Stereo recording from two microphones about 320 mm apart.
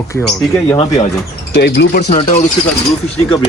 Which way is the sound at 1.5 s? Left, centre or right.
Left.